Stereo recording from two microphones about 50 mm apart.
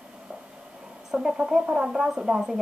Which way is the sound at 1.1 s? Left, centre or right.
Centre.